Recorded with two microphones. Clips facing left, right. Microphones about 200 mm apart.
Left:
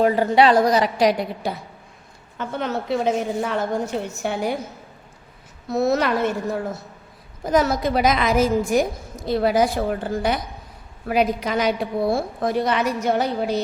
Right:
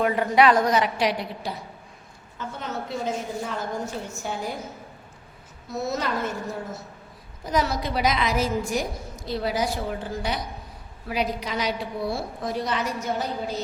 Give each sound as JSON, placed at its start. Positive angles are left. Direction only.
{"t": 0.0, "sound": "a woman's voice", "side_deg": 30}
{"t": 2.4, "sound": "a woman's voice", "side_deg": 70}
{"t": 5.7, "sound": "a woman's voice", "side_deg": 70}
{"t": 7.4, "sound": "a woman's voice", "side_deg": 50}
{"t": 11.1, "sound": "a woman's voice", "side_deg": 50}